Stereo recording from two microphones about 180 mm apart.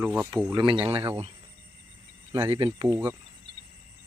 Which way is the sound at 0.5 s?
25° right (ahead or behind).